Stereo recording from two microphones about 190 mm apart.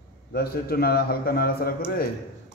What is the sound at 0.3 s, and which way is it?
A man's voice, 55° left (ahead or behind).